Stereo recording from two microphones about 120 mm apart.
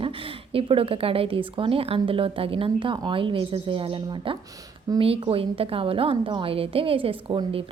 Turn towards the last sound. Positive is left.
turn(degrees=-50)  # may be behind; listen again after turning